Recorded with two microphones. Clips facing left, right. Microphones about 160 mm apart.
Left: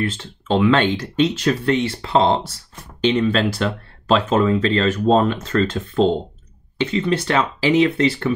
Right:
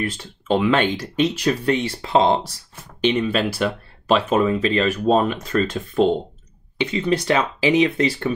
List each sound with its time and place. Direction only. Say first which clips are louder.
0.0 s speech: left 2 dB; 15° right (ahead or behind)